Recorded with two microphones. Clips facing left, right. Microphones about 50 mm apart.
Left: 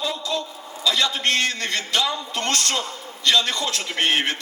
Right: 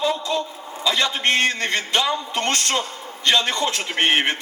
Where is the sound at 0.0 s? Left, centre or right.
Right.